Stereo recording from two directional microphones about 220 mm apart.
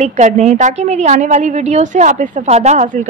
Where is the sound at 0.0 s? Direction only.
30° right (ahead or behind).